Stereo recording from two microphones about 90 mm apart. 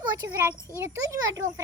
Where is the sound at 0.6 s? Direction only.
30° right (ahead or behind).